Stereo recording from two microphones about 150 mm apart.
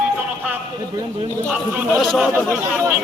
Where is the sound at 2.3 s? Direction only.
15° right (ahead or behind).